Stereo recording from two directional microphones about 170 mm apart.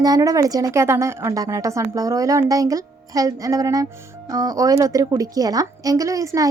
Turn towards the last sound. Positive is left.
turn(degrees=-20)  # may be behind; listen again after turning